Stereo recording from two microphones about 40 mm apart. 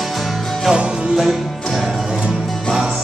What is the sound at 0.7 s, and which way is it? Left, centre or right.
Music, right.